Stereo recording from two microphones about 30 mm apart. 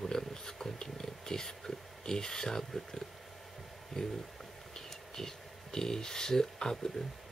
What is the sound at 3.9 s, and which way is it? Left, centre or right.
Speech, centre.